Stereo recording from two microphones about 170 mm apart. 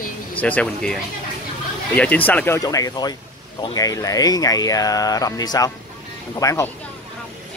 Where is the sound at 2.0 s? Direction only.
10° left (ahead or behind).